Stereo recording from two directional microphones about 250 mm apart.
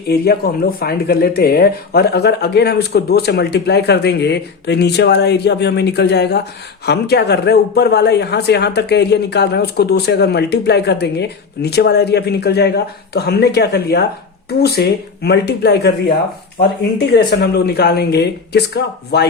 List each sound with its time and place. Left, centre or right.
0.1 s a man's voice: left